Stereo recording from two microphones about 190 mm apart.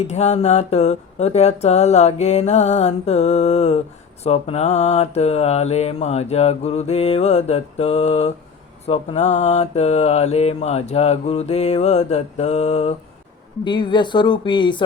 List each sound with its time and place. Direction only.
0.1 s mantra: 35° left (ahead or behind)
13.7 s a woman's voice: 25° left (ahead or behind)